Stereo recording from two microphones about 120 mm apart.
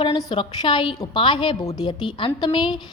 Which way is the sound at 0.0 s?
35° left (ahead or behind).